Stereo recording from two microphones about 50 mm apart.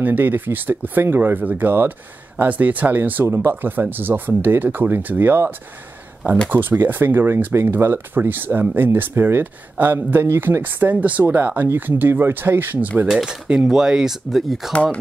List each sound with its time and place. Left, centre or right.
0.0 s speech: right
6.5 s speech: right
9.9 s a man's voice: right
10.6 s speech: right
11.2 s speech: right
13.2 s speech: centre
14.7 s speech: centre